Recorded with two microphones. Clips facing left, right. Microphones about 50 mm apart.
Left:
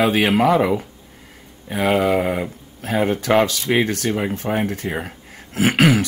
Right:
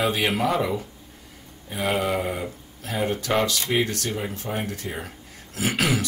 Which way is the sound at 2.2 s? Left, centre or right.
Left.